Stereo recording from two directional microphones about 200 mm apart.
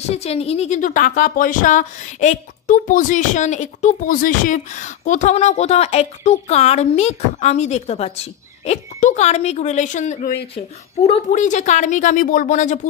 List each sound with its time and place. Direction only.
0.1 s a woman's voice: 30° left (ahead or behind)